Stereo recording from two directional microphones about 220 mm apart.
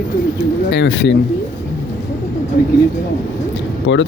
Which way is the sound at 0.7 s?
55° left (ahead or behind).